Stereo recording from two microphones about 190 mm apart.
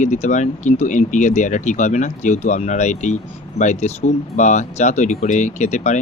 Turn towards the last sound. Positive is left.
turn(degrees=35)  # may be behind; listen again after turning